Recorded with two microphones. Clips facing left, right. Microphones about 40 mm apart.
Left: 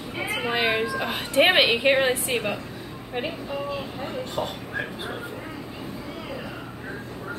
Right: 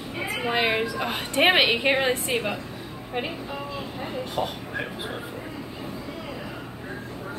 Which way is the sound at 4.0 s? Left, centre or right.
Centre.